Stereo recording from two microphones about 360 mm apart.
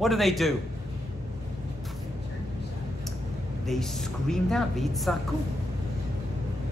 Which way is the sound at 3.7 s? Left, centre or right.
Centre.